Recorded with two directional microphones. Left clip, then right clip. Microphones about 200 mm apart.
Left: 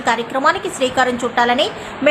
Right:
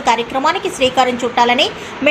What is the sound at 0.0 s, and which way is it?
A woman's voice, centre (ahead or behind).